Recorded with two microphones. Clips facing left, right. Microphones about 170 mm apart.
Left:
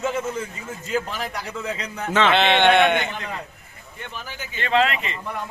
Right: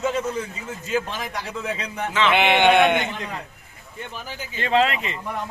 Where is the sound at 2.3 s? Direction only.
15° right (ahead or behind).